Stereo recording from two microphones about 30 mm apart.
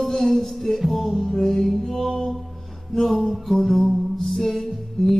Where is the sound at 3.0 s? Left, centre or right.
Centre.